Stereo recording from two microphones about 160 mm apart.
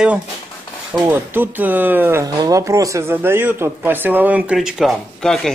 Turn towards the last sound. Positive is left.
turn(degrees=0)  # may be behind; listen again after turning